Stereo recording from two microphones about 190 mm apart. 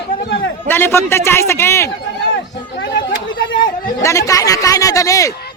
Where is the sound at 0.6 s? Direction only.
10° left (ahead or behind).